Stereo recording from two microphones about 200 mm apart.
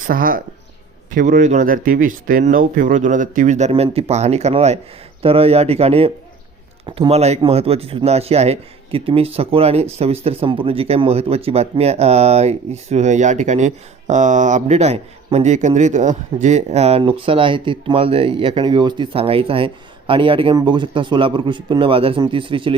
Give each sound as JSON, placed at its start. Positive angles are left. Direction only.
{"t": 0.0, "sound": "speech", "side_deg": -45}